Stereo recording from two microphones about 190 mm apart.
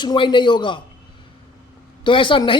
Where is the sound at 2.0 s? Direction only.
25° left (ahead or behind).